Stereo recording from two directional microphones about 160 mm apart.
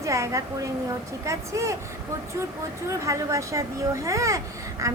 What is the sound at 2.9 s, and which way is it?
A woman's voice, 20° right (ahead or behind).